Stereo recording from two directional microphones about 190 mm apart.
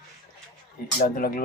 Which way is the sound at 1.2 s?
50° left (ahead or behind).